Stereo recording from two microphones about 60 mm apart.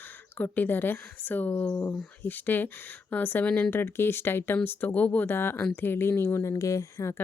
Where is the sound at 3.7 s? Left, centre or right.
Left.